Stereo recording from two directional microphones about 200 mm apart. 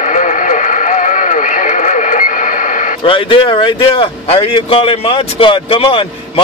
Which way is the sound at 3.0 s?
25° left (ahead or behind).